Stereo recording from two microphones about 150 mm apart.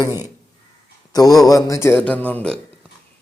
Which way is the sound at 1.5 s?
25° left (ahead or behind).